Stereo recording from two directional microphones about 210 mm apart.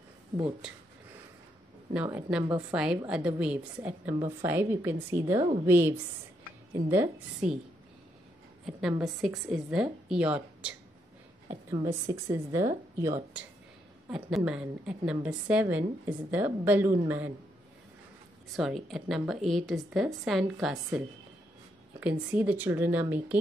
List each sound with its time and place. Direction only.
0.4 s a woman's voice: 5° right (ahead or behind)
2.0 s a woman's voice: 15° right (ahead or behind)
9.0 s a woman's voice: centre (ahead or behind)
11.8 s a woman's voice: 15° right (ahead or behind)
18.6 s a woman's voice: centre (ahead or behind)
22.0 s a woman's voice: 10° right (ahead or behind)